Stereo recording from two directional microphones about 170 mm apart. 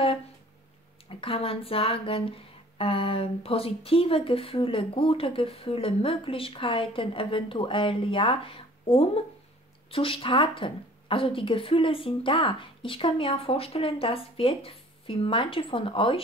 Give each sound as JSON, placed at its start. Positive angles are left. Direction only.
{"t": 1.0, "sound": "speech", "side_deg": 35}